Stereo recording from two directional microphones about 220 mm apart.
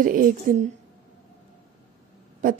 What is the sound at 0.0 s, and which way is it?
Speech, 40° right (ahead or behind).